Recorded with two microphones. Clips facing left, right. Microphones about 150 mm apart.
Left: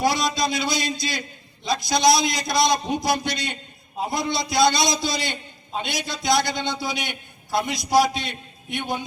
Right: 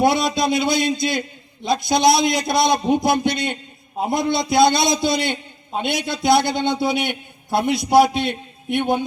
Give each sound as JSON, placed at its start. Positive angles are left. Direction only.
{"t": 0.0, "sound": "a man's voice", "side_deg": -55}